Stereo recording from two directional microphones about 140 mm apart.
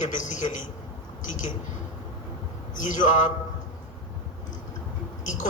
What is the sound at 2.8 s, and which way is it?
Speech, 60° left (ahead or behind).